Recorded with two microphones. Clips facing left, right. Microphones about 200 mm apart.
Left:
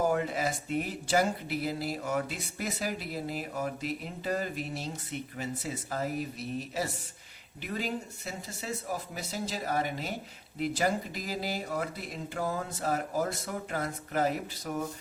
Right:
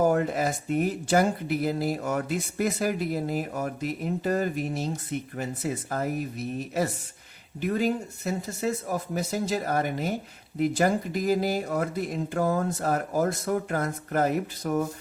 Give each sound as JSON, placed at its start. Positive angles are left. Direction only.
{"t": 0.0, "sound": "speech", "side_deg": -50}